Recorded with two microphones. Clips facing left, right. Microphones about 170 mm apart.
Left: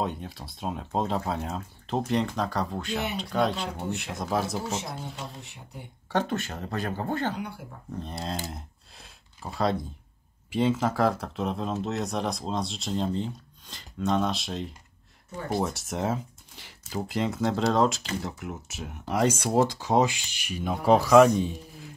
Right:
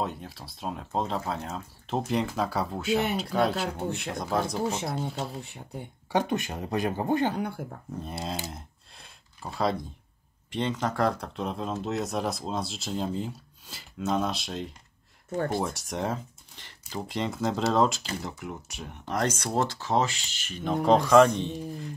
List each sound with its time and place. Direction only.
0.0 s speech: centre (ahead or behind)
4.6 s speech: 55° right (ahead or behind)
6.0 s speech: 15° right (ahead or behind)
7.3 s speech: 50° right (ahead or behind)
7.9 s speech: 5° right (ahead or behind)